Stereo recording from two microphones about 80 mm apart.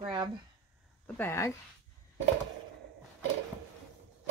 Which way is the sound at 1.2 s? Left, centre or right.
Left.